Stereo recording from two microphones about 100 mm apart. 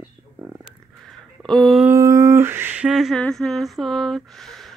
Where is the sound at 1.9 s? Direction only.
30° right (ahead or behind); by 3.2 s 5° right (ahead or behind).